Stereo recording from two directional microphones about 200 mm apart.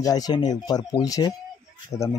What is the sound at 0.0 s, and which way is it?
Speech, 20° left (ahead or behind).